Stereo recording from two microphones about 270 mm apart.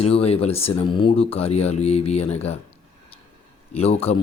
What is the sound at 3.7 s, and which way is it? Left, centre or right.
Speech, left.